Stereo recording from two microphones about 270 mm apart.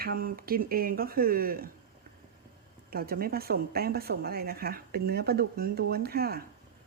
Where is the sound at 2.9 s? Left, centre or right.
Right.